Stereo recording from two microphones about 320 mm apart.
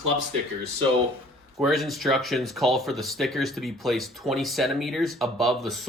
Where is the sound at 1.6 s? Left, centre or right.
Centre.